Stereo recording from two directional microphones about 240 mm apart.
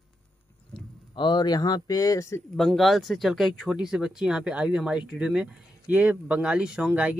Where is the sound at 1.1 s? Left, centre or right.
Centre.